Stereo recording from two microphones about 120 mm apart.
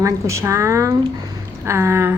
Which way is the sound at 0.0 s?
25° right (ahead or behind).